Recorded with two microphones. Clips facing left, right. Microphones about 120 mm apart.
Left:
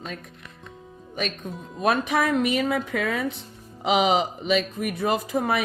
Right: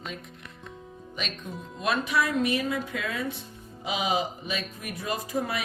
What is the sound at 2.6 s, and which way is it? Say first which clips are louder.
Speech: left 5 dB; 70° left (ahead or behind).